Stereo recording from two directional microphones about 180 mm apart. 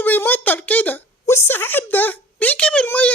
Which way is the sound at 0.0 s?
10° left (ahead or behind).